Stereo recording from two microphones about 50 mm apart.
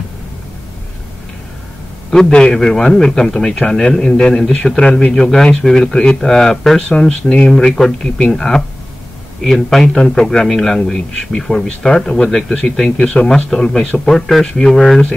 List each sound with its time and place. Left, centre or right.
2.0 s a man's voice: centre